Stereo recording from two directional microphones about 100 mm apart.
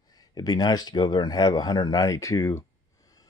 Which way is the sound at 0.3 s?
40° left (ahead or behind).